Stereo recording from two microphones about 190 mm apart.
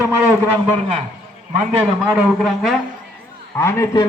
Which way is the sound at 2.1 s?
Centre (ahead or behind).